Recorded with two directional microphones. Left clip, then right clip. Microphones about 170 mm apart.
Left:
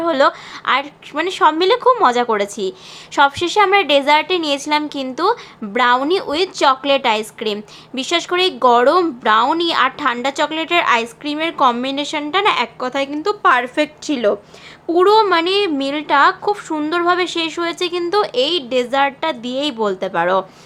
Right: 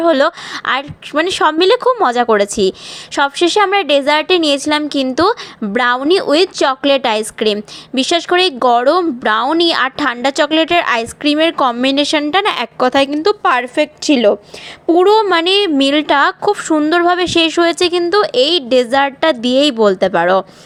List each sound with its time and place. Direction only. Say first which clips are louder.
0.0 s a woman's voice: right 3 dB; 35° right (ahead or behind)